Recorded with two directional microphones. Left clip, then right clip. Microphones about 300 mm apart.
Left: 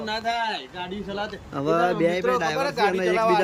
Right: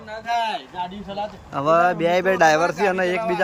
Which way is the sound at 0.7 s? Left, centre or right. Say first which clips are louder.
Right 2 dB; centre.